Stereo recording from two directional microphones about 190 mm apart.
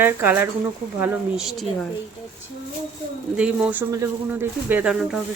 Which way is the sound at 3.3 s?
5° right (ahead or behind).